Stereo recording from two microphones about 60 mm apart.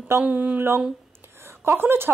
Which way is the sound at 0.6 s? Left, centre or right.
Right.